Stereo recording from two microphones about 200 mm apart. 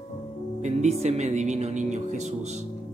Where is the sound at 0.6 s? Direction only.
35° right (ahead or behind).